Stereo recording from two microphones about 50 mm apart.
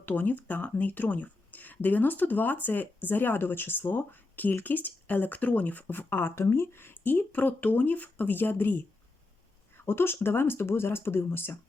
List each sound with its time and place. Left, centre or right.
0.0 s speech: left
9.7 s speech: left